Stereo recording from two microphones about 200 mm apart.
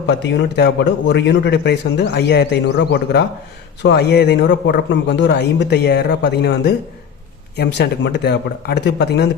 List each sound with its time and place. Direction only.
0.1 s speech: 60° left (ahead or behind)